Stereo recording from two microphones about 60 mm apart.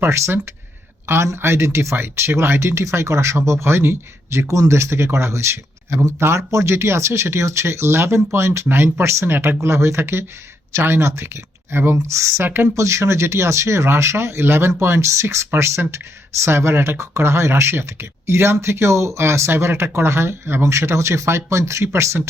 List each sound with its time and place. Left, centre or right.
0.0 s a man's voice: right
4.4 s speech: right
11.9 s speech: right